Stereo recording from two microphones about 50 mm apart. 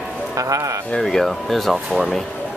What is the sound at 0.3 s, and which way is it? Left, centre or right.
Speech, right.